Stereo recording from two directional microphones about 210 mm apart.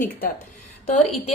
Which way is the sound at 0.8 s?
30° left (ahead or behind).